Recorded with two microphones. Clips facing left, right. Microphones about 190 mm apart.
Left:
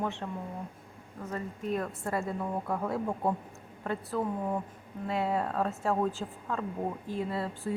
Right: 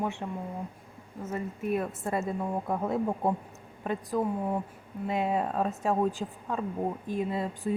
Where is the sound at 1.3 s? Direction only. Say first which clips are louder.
Right 3 dB; 15° right (ahead or behind).